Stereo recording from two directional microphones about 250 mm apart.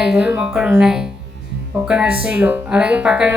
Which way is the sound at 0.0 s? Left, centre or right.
Centre.